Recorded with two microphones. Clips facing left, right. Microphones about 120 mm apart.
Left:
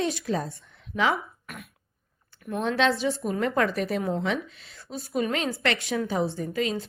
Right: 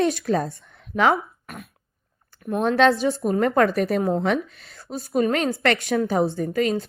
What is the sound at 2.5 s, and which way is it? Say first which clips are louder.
A woman's voice: right 6 dB; 45° right (ahead or behind).